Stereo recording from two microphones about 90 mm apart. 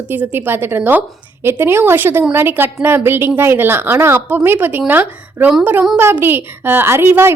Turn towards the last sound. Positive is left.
turn(degrees=-25)  # may be behind; listen again after turning